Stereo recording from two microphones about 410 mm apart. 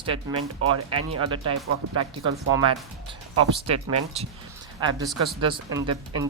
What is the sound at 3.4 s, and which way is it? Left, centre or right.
Speech, centre.